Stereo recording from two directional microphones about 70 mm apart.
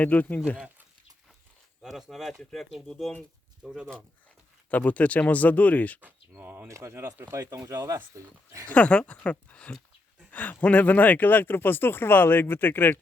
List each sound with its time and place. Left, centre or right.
0.0 s speech: left
1.8 s speech: centre
3.6 s speech: centre
4.7 s speech: left
6.0 s speech: right
6.7 s speech: right
7.7 s speech: right
8.7 s speech: centre